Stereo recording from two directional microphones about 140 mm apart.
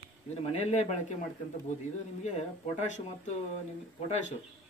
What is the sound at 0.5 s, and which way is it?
Speech, 50° left (ahead or behind).